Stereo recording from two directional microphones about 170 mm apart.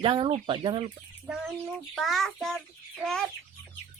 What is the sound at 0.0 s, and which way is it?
Speech, 30° right (ahead or behind).